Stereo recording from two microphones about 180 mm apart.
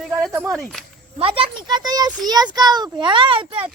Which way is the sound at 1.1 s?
30° right (ahead or behind).